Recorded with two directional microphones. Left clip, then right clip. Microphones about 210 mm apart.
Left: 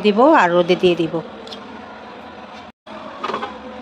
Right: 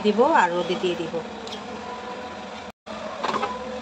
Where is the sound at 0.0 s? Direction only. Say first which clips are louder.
Left 6 dB; 45° left (ahead or behind).